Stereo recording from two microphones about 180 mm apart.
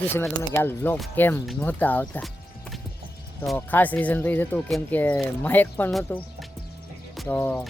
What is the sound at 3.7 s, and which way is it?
Speech, 10° left (ahead or behind).